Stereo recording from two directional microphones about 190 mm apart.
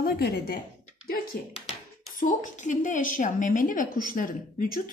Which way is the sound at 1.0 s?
50° left (ahead or behind).